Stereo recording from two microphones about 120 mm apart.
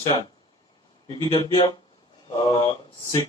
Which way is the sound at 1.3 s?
50° left (ahead or behind).